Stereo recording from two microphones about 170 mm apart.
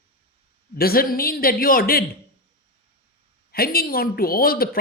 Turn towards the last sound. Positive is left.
turn(degrees=60)  # may be behind; listen again after turning